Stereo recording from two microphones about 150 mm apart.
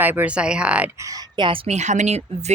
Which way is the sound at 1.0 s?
25° right (ahead or behind).